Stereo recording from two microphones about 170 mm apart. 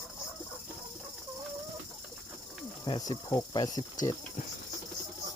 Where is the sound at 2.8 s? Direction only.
25° left (ahead or behind).